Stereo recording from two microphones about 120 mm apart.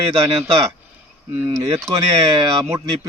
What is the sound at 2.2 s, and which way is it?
Speech, 35° right (ahead or behind).